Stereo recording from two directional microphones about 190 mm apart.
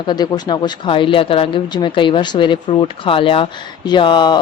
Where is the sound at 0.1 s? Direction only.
20° left (ahead or behind).